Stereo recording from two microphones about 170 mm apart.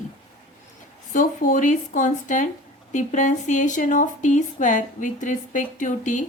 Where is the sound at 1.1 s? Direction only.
50° left (ahead or behind).